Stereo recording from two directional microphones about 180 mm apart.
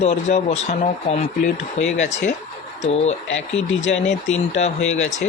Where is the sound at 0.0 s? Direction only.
40° left (ahead or behind).